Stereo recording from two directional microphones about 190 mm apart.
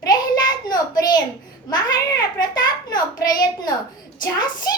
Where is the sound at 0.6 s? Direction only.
20° left (ahead or behind).